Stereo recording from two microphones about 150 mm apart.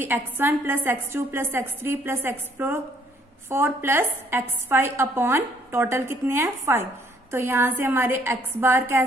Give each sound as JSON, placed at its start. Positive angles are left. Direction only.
{"t": 0.0, "sound": "a woman's voice", "side_deg": -15}